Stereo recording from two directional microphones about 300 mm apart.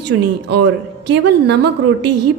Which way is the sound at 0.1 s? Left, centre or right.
Right.